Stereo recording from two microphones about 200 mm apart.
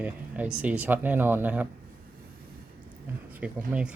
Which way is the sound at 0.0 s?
5° right (ahead or behind).